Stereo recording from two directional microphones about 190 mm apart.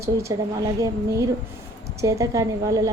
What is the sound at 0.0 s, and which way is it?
A woman's voice, 15° right (ahead or behind).